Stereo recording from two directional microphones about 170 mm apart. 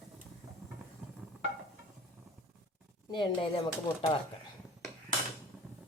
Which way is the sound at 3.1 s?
30° left (ahead or behind).